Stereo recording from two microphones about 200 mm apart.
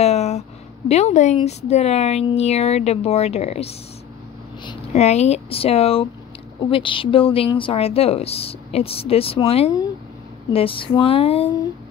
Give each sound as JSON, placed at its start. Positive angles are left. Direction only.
{"t": 0.0, "sound": "a woman's voice", "side_deg": 35}